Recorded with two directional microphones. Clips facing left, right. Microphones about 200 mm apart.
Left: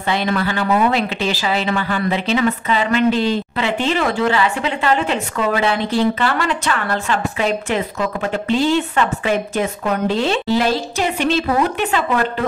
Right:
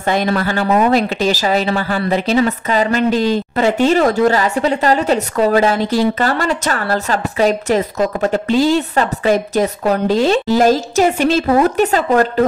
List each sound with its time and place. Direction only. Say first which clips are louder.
0.0 s speech: right 3 dB; 45° right (ahead or behind)